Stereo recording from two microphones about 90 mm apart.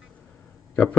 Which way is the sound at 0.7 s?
15° left (ahead or behind).